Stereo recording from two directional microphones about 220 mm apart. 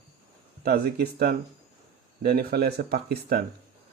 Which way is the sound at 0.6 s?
45° right (ahead or behind).